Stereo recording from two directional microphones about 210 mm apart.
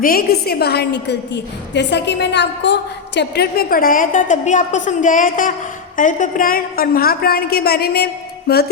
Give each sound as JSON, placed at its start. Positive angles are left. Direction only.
{"t": 0.0, "sound": "a woman's voice", "side_deg": 45}